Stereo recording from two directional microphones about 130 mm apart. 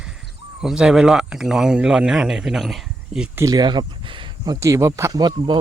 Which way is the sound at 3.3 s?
25° right (ahead or behind).